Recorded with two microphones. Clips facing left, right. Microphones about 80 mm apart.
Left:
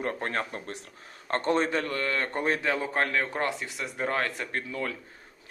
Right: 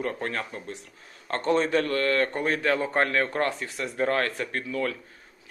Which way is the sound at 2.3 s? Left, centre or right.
Left.